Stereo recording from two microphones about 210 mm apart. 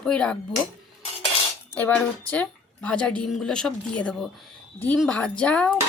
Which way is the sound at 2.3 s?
5° left (ahead or behind).